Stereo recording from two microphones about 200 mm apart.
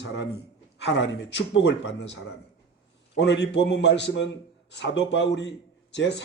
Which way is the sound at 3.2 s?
60° left (ahead or behind).